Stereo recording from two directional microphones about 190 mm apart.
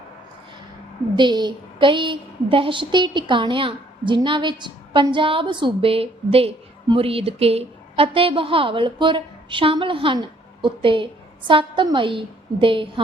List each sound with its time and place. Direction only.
1.1 s a woman's voice: 25° right (ahead or behind)